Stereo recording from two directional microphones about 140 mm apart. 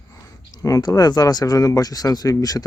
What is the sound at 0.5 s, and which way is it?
Speech, 25° left (ahead or behind).